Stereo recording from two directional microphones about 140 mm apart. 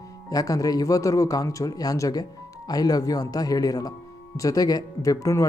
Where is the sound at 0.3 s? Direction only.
25° left (ahead or behind).